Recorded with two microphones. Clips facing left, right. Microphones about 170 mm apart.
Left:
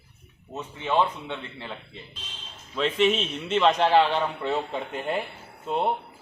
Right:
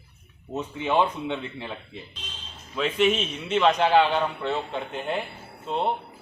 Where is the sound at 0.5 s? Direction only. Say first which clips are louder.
Right 1 dB; 15° right (ahead or behind).